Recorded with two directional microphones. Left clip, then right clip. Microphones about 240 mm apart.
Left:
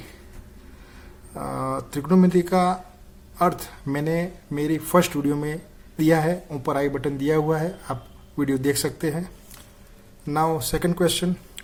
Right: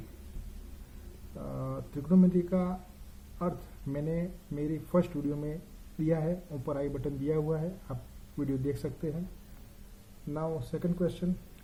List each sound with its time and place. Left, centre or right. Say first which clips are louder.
1.4 s speech: left 12 dB; left
10.3 s speech: left 13 dB; left